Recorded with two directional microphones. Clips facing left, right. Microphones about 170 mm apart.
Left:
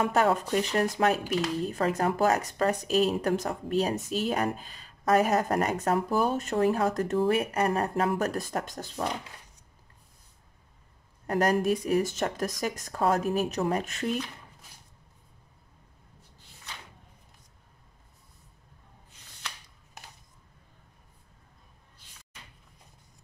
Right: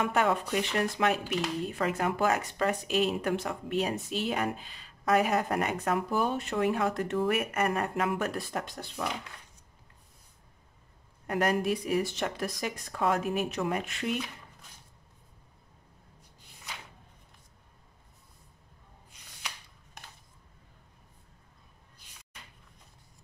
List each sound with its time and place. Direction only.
0.0 s speech: 40° left (ahead or behind)
11.2 s speech: 40° left (ahead or behind)